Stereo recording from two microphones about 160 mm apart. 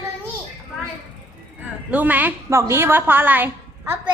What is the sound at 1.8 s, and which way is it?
A woman's voice, 10° right (ahead or behind).